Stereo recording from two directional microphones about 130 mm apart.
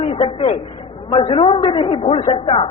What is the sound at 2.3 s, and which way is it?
Speech, 45° left (ahead or behind).